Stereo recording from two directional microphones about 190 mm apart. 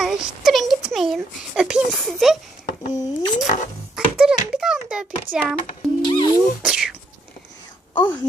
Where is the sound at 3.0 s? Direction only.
20° left (ahead or behind).